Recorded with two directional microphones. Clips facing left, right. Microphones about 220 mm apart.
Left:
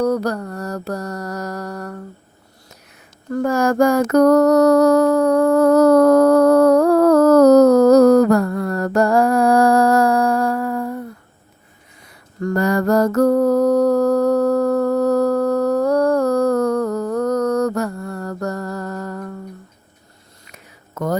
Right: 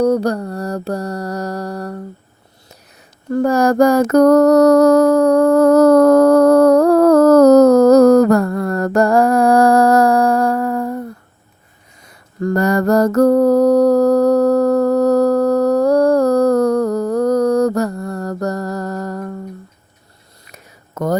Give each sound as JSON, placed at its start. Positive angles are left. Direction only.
{"t": 0.0, "sound": "mantra", "side_deg": -30}
{"t": 3.3, "sound": "music", "side_deg": -35}
{"t": 12.4, "sound": "mantra", "side_deg": -35}
{"t": 20.5, "sound": "a sound", "side_deg": -40}